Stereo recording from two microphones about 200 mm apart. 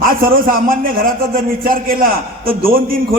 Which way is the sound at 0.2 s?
45° right (ahead or behind).